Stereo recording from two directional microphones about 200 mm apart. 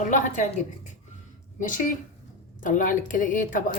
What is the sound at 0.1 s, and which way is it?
Speech, 35° left (ahead or behind).